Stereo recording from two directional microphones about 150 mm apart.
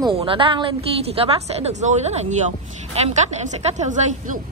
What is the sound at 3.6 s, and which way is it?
Speech, 50° right (ahead or behind).